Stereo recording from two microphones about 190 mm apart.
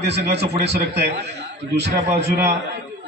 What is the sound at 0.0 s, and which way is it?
Speech, 60° right (ahead or behind).